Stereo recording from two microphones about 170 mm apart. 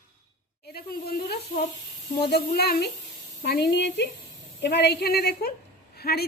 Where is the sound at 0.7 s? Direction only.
65° left (ahead or behind).